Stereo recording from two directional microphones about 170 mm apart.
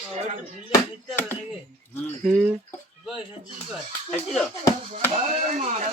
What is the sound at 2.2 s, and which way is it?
Speech, centre (ahead or behind).